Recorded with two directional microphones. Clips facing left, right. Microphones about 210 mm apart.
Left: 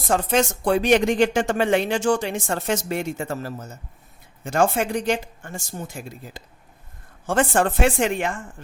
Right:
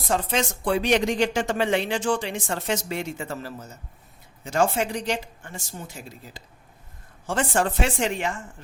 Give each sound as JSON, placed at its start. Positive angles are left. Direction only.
{"t": 0.1, "sound": "speech", "side_deg": 45}